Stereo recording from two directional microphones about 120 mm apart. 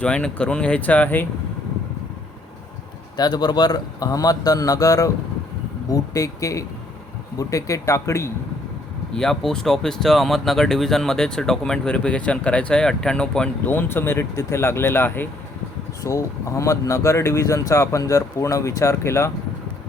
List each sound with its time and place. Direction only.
0.0 s speech: 10° left (ahead or behind)
3.2 s a man's voice: 35° left (ahead or behind)
9.1 s speech: 5° left (ahead or behind); by 19.3 s 25° left (ahead or behind)